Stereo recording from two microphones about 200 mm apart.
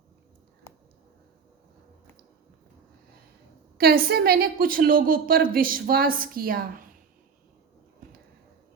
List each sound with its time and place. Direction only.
3.8 s a woman's voice: 50° right (ahead or behind)